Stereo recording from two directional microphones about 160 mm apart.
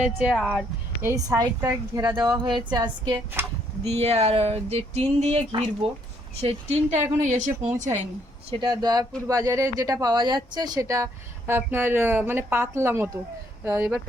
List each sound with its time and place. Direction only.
0.0 s speech: 5° right (ahead or behind)
1.0 s speech: 20° right (ahead or behind)
3.4 s speech: 15° right (ahead or behind)
3.8 s a sound: 40° right (ahead or behind)
6.4 s speech: 40° right (ahead or behind)
8.4 s speech: 30° right (ahead or behind); by 14.1 s 10° right (ahead or behind)